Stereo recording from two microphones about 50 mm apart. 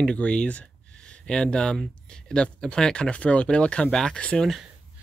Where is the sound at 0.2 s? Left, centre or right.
Left.